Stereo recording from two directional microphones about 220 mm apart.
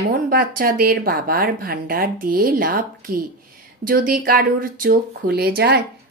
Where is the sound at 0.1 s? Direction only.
40° right (ahead or behind).